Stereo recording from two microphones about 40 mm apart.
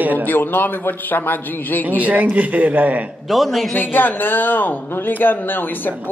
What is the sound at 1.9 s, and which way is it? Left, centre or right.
Speech, right.